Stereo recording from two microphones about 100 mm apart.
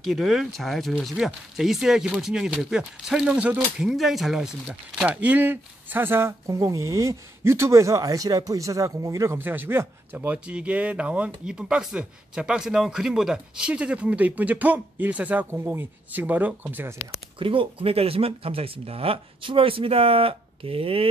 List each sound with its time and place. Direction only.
0.0 s speech: centre (ahead or behind)
5.0 s speech: 15° right (ahead or behind); by 9.4 s 30° right (ahead or behind)
9.4 s speech: 20° right (ahead or behind)
17.4 s speech: 60° right (ahead or behind)